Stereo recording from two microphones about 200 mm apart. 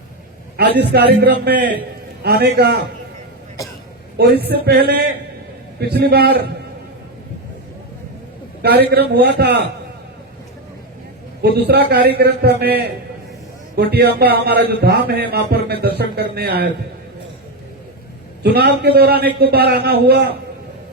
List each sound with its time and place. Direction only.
0.5 s a man's voice: 55° right (ahead or behind)
3.6 s a man's voice: 15° left (ahead or behind)
4.2 s a man's voice: 50° right (ahead or behind)
8.9 s a man's voice: 55° right (ahead or behind)
11.5 s a man's voice: 50° right (ahead or behind)
13.9 s a man's voice: 50° right (ahead or behind)
18.4 s a man's voice: 55° right (ahead or behind)